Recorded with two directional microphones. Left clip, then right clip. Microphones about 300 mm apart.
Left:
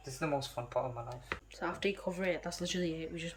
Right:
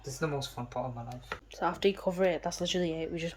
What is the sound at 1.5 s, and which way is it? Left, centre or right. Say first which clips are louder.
Speech: right 7 dB; centre.